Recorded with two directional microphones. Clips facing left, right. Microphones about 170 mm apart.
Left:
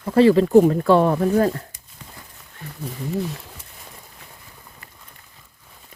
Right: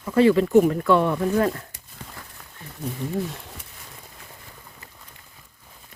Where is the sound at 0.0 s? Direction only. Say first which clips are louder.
Left 3 dB; 35° left (ahead or behind).